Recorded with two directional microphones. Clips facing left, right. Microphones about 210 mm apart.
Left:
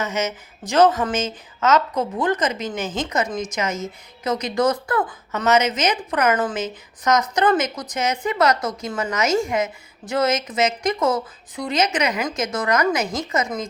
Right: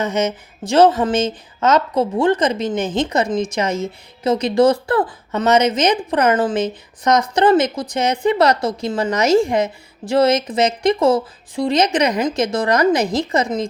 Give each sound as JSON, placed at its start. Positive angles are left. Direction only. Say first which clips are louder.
{"t": 0.0, "sound": "a woman's voice", "louder": "right 5 dB", "side_deg": -30}